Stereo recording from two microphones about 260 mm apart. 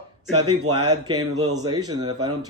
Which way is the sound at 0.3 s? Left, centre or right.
Right.